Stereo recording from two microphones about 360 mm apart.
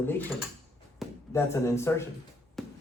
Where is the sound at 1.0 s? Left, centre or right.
Centre.